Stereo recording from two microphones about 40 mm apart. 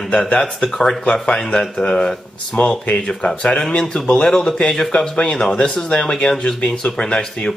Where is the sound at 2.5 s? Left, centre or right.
Left.